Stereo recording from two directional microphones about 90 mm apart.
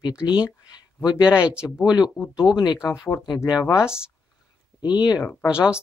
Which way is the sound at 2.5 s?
55° left (ahead or behind).